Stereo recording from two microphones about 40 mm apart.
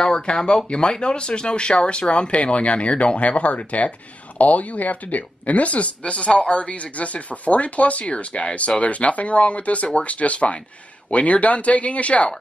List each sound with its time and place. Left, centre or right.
0.0 s speech: left